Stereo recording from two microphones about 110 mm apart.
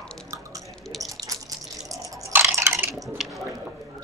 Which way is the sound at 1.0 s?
30° right (ahead or behind).